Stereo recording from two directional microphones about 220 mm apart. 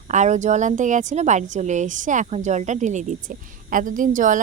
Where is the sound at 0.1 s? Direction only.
35° right (ahead or behind).